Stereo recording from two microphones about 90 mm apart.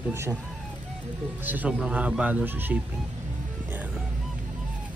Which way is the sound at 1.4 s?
20° right (ahead or behind).